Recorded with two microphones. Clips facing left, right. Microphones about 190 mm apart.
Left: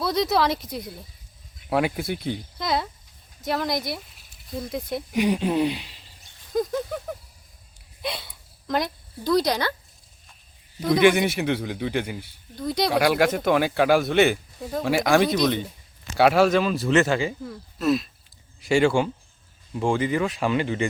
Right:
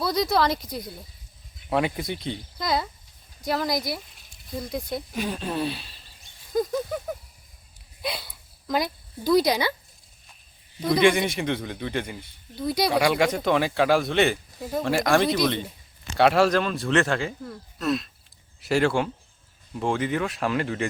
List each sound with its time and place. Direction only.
0.0 s speech: centre (ahead or behind)
5.1 s speech: 15° left (ahead or behind)
6.5 s a sound: 5° right (ahead or behind)
10.8 s speech: centre (ahead or behind)
12.5 s speech: 5° right (ahead or behind)